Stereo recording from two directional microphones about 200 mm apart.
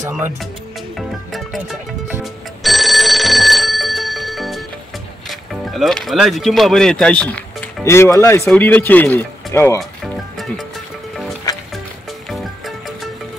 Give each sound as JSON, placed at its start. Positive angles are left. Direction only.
{"t": 0.1, "sound": "speech", "side_deg": 0}
{"t": 0.9, "sound": "music", "side_deg": 0}
{"t": 5.3, "sound": "speech", "side_deg": 0}
{"t": 10.3, "sound": "music", "side_deg": 0}
{"t": 11.5, "sound": "music", "side_deg": 20}
{"t": 12.3, "sound": "music", "side_deg": 0}